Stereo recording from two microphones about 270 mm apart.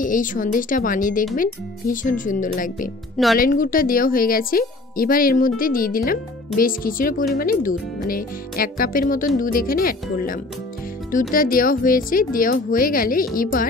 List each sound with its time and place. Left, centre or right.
0.0 s speech: left